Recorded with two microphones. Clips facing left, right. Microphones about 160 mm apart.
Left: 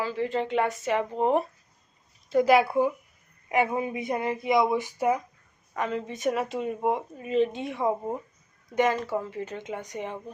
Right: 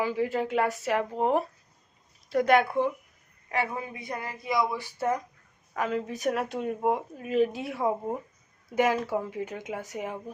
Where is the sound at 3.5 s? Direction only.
20° left (ahead or behind).